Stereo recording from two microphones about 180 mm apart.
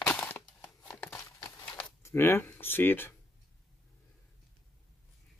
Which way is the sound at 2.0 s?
15° left (ahead or behind).